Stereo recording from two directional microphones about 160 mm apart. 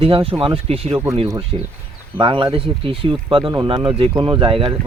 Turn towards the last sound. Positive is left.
turn(degrees=-35)  # may be behind; listen again after turning